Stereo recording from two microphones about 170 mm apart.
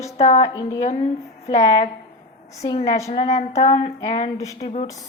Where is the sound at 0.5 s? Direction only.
25° left (ahead or behind).